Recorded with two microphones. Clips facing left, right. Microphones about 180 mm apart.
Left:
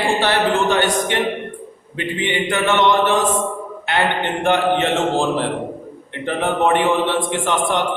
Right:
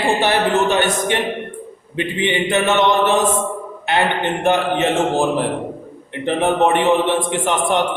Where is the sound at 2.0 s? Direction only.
20° right (ahead or behind).